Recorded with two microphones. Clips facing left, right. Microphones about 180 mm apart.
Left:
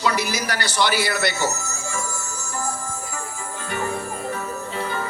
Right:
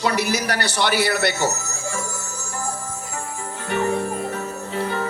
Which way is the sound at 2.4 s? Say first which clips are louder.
Even; 65° right (ahead or behind).